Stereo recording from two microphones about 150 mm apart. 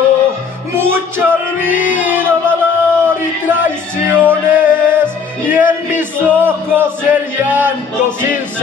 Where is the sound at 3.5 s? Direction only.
10° right (ahead or behind).